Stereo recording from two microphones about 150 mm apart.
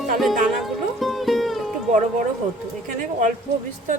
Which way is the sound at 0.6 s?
Centre (ahead or behind).